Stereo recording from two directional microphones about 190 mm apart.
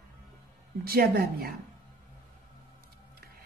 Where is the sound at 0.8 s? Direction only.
50° right (ahead or behind).